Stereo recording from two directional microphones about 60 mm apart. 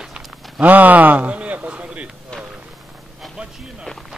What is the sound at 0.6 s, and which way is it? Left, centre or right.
Speech, right.